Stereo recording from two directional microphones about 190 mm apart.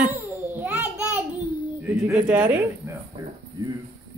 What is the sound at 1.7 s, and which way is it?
Bird, 10° right (ahead or behind).